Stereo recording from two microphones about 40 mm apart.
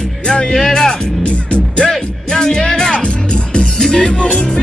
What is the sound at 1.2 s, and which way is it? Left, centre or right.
Music, left.